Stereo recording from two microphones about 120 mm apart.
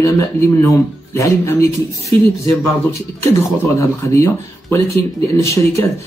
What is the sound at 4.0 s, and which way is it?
Speech, 25° left (ahead or behind).